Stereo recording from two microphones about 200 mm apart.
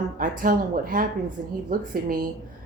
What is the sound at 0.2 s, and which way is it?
Speech, 45° right (ahead or behind).